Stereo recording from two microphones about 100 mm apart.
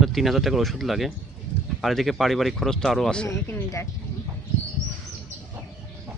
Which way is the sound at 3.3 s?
30° left (ahead or behind).